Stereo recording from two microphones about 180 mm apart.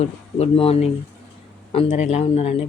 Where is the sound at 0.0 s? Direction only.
35° left (ahead or behind).